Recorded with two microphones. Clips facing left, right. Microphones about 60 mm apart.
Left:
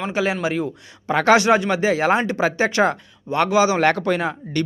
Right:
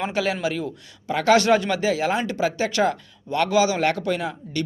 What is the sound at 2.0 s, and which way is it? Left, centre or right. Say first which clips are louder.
Speech: left 4 dB; left.